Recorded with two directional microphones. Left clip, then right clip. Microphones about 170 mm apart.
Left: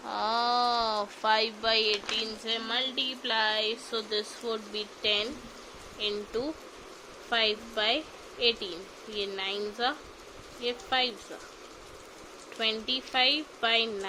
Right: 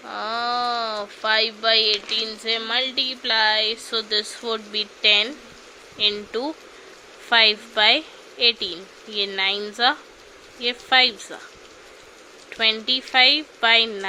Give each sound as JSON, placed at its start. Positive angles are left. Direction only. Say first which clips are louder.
{"t": 0.1, "sound": "a sound", "louder": "right 3 dB", "side_deg": 10}
{"t": 2.0, "sound": "speech", "louder": "right 7 dB", "side_deg": -5}
{"t": 2.4, "sound": "speech", "louder": "right 8 dB", "side_deg": -20}
{"t": 12.5, "sound": "speech", "louder": "right 9 dB", "side_deg": -15}